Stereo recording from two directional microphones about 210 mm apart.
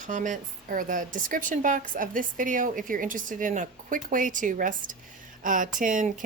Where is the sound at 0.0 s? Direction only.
35° right (ahead or behind).